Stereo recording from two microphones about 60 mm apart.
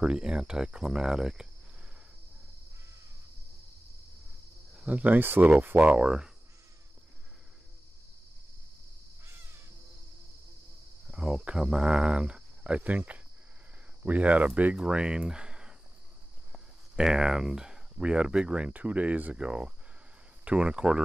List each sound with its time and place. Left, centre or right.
0.0 s speech: centre
4.7 s speech: right
5.2 s speech: right
5.9 s speech: centre
9.2 s crow: right
11.1 s speech: centre
16.9 s speech: centre